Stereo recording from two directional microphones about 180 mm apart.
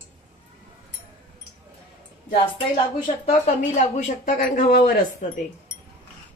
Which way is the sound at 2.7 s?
35° left (ahead or behind).